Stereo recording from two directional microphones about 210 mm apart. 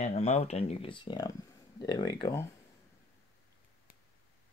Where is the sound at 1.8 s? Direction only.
20° left (ahead or behind).